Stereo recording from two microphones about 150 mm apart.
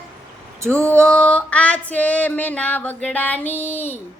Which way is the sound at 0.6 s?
15° right (ahead or behind).